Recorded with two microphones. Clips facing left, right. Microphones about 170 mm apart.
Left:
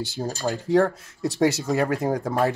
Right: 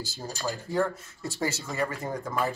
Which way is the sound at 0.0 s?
70° left (ahead or behind).